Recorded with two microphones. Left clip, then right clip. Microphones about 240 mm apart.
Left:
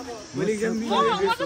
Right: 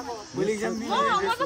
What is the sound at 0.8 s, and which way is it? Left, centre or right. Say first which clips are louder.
Speech: left 2 dB; right.